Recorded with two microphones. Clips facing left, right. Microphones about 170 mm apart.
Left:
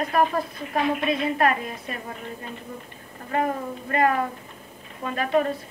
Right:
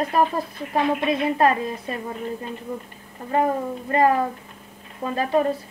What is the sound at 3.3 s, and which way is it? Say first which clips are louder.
Speech: right 4 dB; 25° right (ahead or behind).